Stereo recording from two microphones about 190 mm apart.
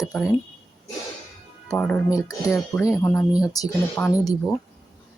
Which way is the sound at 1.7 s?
10° left (ahead or behind).